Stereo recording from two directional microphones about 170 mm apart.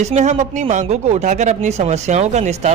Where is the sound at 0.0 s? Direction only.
40° right (ahead or behind).